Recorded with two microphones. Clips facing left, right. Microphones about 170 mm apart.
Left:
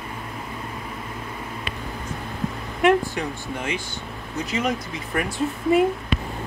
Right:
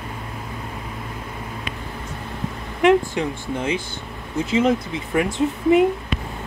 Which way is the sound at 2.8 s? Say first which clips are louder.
Right 3 dB; 25° right (ahead or behind).